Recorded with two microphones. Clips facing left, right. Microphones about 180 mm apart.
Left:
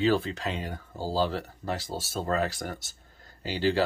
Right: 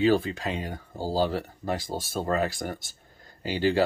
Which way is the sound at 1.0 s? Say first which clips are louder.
Right 2 dB; 15° right (ahead or behind).